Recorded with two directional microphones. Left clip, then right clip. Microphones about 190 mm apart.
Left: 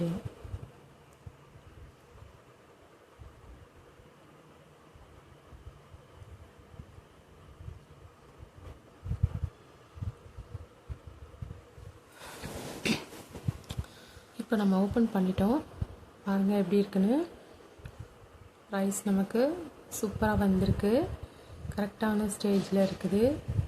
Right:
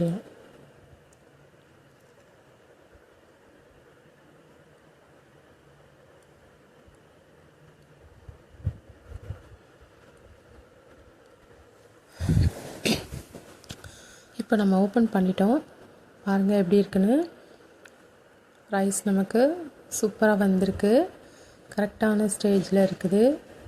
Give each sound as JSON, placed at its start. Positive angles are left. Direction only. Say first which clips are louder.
{"t": 12.4, "sound": "cough", "louder": "right 2 dB", "side_deg": -25}
{"t": 13.6, "sound": "a sound", "louder": "right 2 dB", "side_deg": -25}
{"t": 16.2, "sound": "speech", "louder": "right 6 dB", "side_deg": -30}
{"t": 18.7, "sound": "speech", "louder": "right 6 dB", "side_deg": -25}